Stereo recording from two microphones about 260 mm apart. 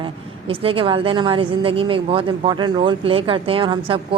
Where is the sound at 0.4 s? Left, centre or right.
Right.